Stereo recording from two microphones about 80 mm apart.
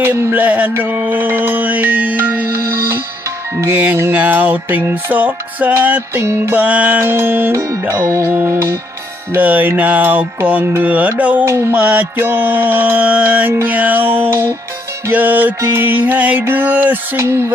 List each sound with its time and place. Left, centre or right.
0.0 s music: right
9.3 s music: right
11.4 s music: right
11.7 s music: right
17.2 s music: right